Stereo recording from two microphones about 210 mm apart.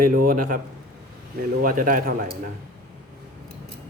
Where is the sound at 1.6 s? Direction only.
40° right (ahead or behind).